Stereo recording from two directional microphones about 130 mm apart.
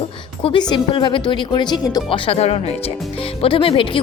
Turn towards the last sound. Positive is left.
turn(degrees=45)  # may be behind; listen again after turning